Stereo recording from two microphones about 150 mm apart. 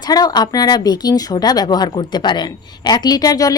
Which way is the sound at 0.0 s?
25° left (ahead or behind).